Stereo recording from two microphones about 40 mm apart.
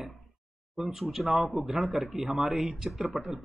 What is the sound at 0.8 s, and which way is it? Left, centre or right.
Speech, centre.